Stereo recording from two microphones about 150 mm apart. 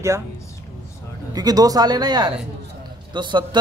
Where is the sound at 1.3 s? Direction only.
25° right (ahead or behind).